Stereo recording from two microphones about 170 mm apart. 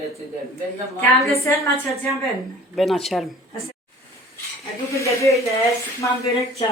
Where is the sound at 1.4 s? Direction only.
15° left (ahead or behind).